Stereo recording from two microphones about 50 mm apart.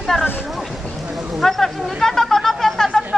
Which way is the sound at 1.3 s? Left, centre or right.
Centre.